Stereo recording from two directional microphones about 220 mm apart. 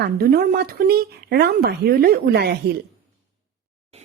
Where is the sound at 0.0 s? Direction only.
45° right (ahead or behind).